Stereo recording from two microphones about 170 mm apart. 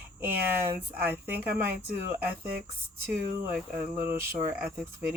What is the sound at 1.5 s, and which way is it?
Speech, 60° right (ahead or behind).